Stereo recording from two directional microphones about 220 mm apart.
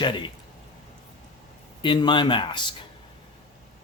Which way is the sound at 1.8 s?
20° left (ahead or behind).